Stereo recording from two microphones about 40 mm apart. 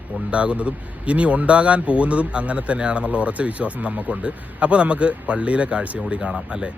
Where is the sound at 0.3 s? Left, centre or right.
Right.